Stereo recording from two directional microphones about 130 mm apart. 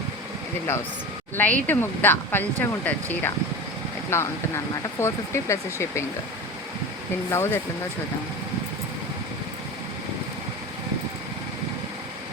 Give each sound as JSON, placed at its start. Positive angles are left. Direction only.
{"t": 1.4, "sound": "speech", "side_deg": 10}
{"t": 7.3, "sound": "speech", "side_deg": 20}